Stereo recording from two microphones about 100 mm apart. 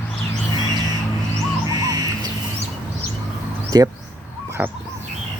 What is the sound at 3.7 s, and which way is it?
Speech, 40° right (ahead or behind).